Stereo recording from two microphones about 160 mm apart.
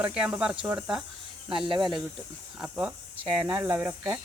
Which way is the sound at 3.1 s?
30° right (ahead or behind).